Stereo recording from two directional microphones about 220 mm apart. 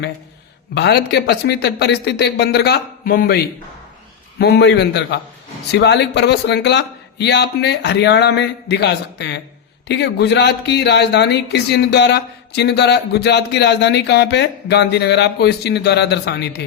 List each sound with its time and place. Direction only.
0.7 s speech: 45° left (ahead or behind)